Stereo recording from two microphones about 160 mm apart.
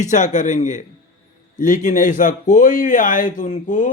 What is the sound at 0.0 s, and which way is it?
Speech, 50° left (ahead or behind).